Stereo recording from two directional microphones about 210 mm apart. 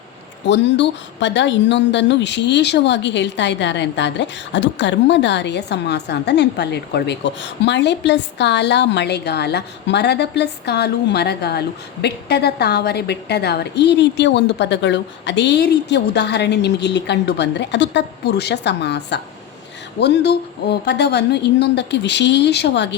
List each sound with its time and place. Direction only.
0.4 s a woman's voice: 55° left (ahead or behind)